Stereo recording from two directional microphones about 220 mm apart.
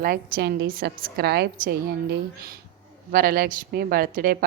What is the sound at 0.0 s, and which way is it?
A woman's voice, 45° right (ahead or behind).